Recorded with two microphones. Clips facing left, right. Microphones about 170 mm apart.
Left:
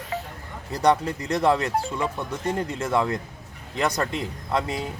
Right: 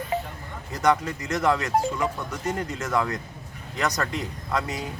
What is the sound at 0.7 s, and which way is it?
Speech, 30° left (ahead or behind).